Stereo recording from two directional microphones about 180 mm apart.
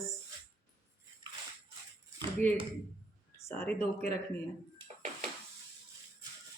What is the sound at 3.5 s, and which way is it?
Speech, 10° left (ahead or behind).